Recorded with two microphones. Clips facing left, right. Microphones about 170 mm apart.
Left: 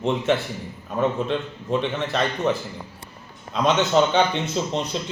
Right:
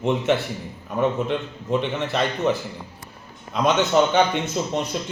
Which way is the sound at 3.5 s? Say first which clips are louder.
Even; 10° right (ahead or behind).